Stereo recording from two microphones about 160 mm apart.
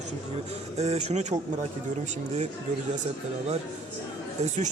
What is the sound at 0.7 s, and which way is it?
A man's voice, 45° right (ahead or behind).